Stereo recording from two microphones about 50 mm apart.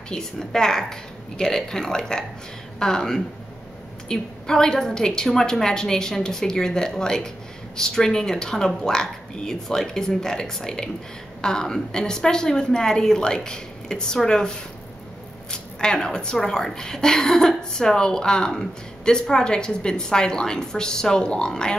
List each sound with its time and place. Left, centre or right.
0.1 s speech: centre
15.5 s speech: centre